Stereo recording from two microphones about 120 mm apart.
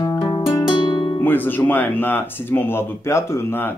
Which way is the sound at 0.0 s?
35° left (ahead or behind).